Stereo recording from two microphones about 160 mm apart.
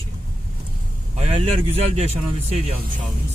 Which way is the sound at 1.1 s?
40° right (ahead or behind).